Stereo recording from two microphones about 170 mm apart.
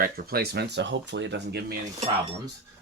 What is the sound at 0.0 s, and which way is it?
Speech, 65° right (ahead or behind).